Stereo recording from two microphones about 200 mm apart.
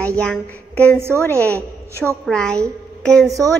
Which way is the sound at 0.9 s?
10° right (ahead or behind).